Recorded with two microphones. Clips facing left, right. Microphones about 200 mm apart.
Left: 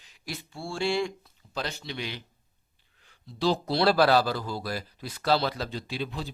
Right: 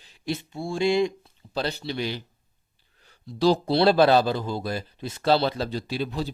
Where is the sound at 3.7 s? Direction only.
25° right (ahead or behind).